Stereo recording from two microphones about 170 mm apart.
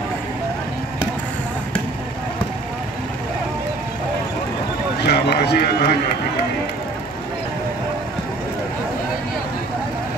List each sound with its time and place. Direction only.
5.0 s run: 75° left (ahead or behind)